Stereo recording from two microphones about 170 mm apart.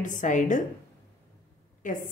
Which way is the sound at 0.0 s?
50° left (ahead or behind).